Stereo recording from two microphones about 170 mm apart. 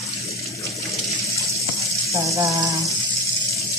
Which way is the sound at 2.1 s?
20° right (ahead or behind).